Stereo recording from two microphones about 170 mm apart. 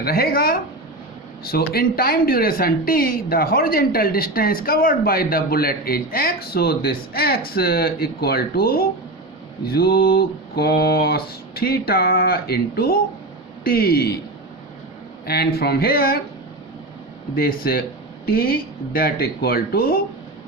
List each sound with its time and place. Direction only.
0.0 s a woman's voice: 65° left (ahead or behind)
15.3 s a woman's voice: 65° left (ahead or behind)
17.3 s a woman's voice: 60° left (ahead or behind)